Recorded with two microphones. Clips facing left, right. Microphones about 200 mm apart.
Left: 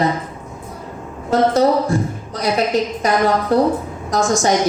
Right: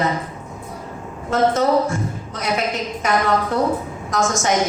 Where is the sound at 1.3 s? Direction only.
35° left (ahead or behind).